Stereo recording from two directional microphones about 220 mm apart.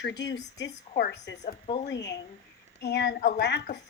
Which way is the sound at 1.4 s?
30° left (ahead or behind).